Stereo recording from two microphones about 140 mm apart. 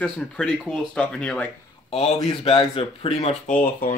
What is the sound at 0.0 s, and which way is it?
Speech, 5° left (ahead or behind).